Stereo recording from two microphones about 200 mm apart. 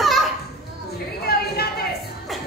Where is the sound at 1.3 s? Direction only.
50° left (ahead or behind).